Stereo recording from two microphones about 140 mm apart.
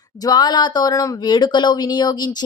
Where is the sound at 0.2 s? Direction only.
30° left (ahead or behind).